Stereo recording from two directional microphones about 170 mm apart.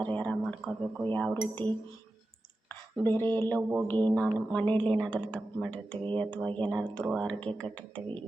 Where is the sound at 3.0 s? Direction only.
10° left (ahead or behind).